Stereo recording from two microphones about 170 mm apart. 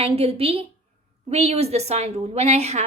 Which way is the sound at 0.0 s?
35° right (ahead or behind).